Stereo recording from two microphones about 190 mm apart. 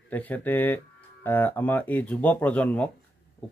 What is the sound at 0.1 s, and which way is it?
Speech, 10° left (ahead or behind).